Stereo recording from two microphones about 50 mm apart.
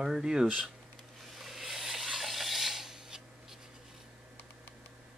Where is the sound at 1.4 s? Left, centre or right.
Centre.